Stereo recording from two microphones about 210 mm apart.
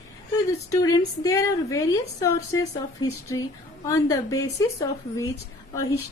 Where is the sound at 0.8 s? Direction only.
15° left (ahead or behind).